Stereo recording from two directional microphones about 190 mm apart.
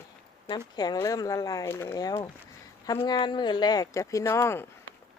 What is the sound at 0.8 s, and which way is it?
Speech, 20° left (ahead or behind).